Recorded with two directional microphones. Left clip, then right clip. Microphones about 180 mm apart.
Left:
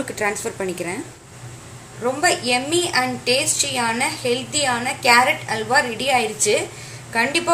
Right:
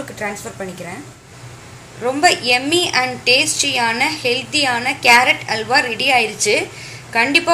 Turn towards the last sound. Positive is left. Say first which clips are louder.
# right 5 dB
turn(degrees=-15)  # may be behind; listen again after turning